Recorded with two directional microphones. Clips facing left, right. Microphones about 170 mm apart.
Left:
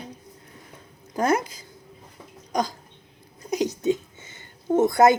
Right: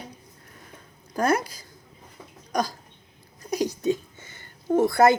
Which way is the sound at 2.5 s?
20° left (ahead or behind).